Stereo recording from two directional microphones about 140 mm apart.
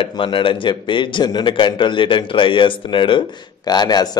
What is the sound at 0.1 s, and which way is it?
A man's voice, 35° left (ahead or behind).